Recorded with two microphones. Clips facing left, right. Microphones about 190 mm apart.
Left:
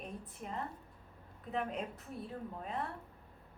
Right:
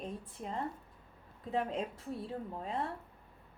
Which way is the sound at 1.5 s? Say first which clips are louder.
Right 3 dB; 30° right (ahead or behind).